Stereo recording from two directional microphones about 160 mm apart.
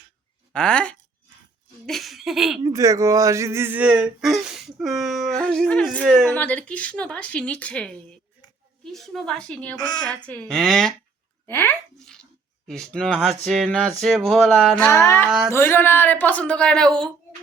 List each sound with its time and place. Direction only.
0.5 s speech: 5° left (ahead or behind)
2.6 s speech: 20° right (ahead or behind); by 9.7 s 5° left (ahead or behind)
9.7 s a woman's voice: 25° left (ahead or behind)
10.2 s speech: 5° left (ahead or behind)
11.4 s speech: 10° left (ahead or behind)
14.8 s speech: 10° left (ahead or behind)